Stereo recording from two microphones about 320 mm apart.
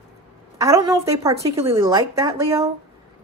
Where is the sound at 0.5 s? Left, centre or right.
Centre.